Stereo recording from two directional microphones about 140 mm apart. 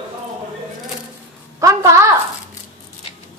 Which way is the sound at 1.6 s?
20° right (ahead or behind).